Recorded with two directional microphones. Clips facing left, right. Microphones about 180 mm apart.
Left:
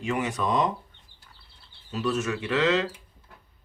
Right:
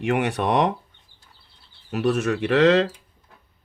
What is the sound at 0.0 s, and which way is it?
Speech, 65° right (ahead or behind).